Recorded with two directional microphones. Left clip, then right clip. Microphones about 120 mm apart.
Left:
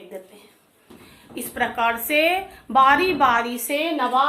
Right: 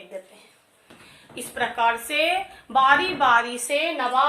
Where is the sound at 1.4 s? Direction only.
20° left (ahead or behind).